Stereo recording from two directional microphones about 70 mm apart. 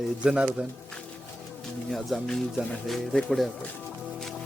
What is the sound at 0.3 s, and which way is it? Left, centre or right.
Speech, centre.